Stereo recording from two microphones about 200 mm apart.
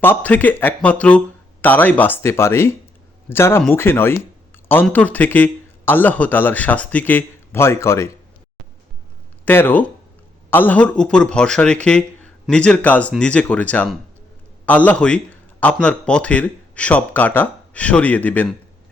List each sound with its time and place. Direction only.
0.0 s a man's voice: 10° left (ahead or behind)
9.5 s a man's voice: 10° left (ahead or behind)